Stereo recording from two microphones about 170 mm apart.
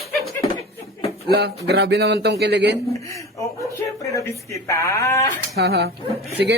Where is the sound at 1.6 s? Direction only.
80° right.